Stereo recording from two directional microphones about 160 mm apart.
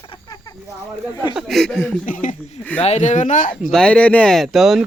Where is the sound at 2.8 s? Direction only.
45° left (ahead or behind).